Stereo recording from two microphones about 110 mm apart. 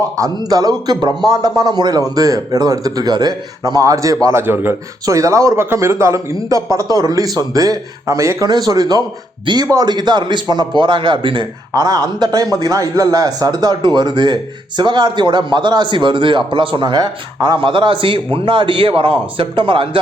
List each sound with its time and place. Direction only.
0.2 s a man's voice: 35° right (ahead or behind)
11.7 s a man's voice: 35° right (ahead or behind)